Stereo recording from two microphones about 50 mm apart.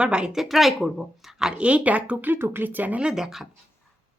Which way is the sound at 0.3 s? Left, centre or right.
Centre.